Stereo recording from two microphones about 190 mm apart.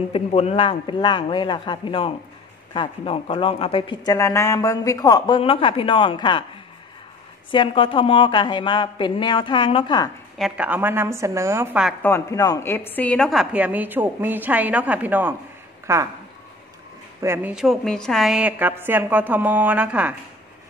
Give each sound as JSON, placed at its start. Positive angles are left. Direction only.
{"t": 0.1, "sound": "speech", "side_deg": 30}
{"t": 7.5, "sound": "speech", "side_deg": 25}
{"t": 10.3, "sound": "a woman's voice", "side_deg": -5}
{"t": 12.0, "sound": "a woman's voice", "side_deg": 15}
{"t": 17.2, "sound": "a woman's voice", "side_deg": -10}